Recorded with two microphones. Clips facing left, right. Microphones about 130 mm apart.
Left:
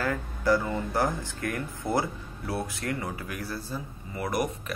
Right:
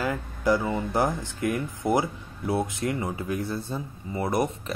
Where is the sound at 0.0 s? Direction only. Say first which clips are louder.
Right 2 dB; 15° right (ahead or behind).